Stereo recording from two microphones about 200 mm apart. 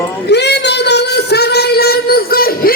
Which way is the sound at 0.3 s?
55° left (ahead or behind).